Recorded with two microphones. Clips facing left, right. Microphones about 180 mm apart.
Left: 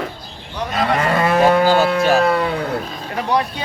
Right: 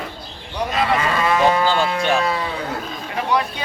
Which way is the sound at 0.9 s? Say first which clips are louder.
Left 5 dB; 55° left (ahead or behind).